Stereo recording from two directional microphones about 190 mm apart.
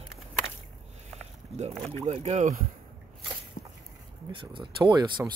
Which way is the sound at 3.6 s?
40° left (ahead or behind).